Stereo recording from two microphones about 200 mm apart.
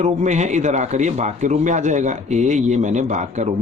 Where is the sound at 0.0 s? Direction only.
35° right (ahead or behind).